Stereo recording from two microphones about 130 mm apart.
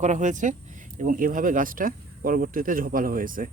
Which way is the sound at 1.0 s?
90° right.